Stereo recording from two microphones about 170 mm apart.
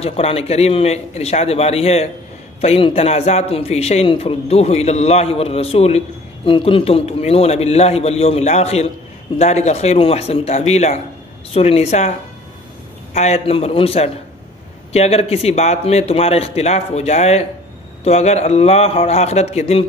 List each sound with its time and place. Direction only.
0.0 s a man's voice: 35° left (ahead or behind)
13.1 s a man's voice: 40° left (ahead or behind)